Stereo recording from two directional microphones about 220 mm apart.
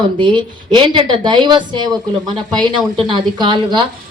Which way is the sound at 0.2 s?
20° right (ahead or behind).